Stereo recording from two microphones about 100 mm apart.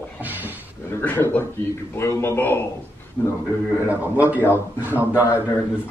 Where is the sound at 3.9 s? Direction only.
15° right (ahead or behind).